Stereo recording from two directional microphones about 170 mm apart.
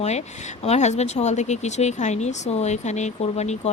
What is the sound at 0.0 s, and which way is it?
Speech, 40° left (ahead or behind).